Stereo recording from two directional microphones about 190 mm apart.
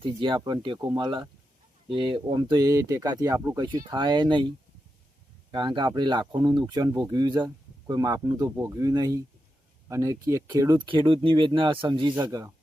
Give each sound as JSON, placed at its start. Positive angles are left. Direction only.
{"t": 0.0, "sound": "speech", "side_deg": -25}